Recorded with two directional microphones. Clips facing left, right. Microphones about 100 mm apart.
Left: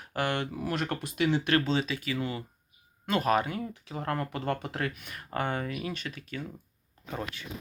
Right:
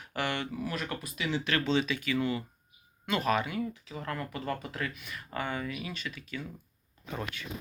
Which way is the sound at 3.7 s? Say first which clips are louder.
Left 4 dB; 55° left (ahead or behind).